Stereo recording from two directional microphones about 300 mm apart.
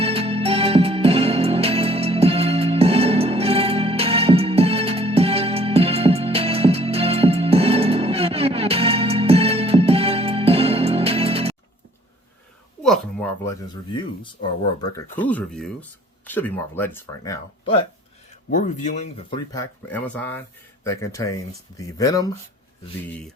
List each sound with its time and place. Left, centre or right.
0.0 s music: centre
12.8 s a sound: centre
14.9 s speech: centre
18.5 s speech: left